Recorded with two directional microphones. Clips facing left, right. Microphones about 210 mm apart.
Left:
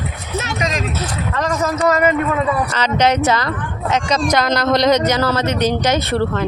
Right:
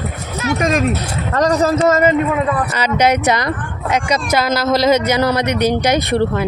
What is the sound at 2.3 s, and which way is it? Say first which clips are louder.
Speech: right 1 dB; 10° right (ahead or behind).